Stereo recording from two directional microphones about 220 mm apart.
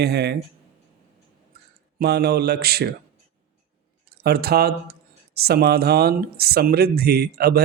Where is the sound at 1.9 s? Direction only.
45° right (ahead or behind).